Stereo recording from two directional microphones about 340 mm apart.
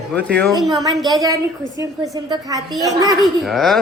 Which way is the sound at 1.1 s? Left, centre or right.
Centre.